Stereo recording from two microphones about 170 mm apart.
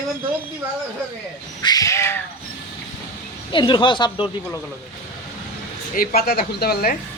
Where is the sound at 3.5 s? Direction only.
30° left (ahead or behind).